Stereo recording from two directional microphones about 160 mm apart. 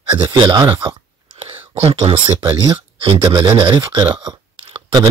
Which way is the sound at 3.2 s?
25° right (ahead or behind).